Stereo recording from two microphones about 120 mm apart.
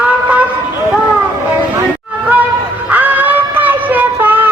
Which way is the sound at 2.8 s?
15° right (ahead or behind).